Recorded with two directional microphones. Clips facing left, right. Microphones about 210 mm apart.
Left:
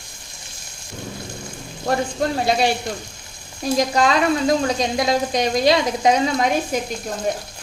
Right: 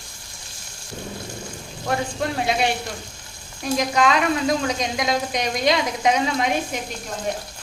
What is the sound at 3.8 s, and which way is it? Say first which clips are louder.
Speech: left 2 dB; 35° left (ahead or behind).